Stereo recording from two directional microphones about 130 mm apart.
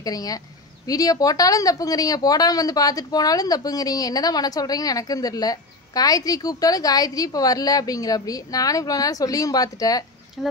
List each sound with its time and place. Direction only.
0.0 s speech: 30° left (ahead or behind)
10.4 s speech: centre (ahead or behind)